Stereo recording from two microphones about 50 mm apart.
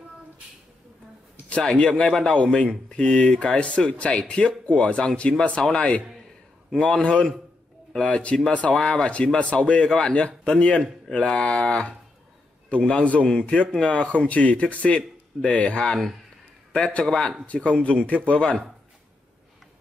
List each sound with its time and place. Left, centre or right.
1.6 s a man's voice: centre